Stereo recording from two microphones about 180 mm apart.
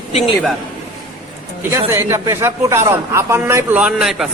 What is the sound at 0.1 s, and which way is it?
Speech, 35° left (ahead or behind).